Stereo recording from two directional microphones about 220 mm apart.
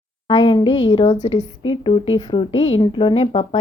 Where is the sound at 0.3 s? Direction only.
20° left (ahead or behind).